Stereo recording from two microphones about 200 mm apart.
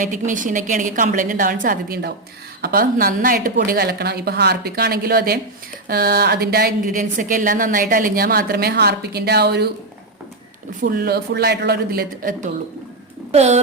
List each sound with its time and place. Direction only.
0.0 s a woman's voice: 40° right (ahead or behind)
10.8 s speech: 50° right (ahead or behind)
13.3 s a woman's voice: 35° right (ahead or behind)